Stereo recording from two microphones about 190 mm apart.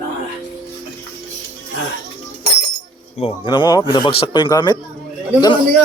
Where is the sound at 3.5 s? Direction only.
20° left (ahead or behind).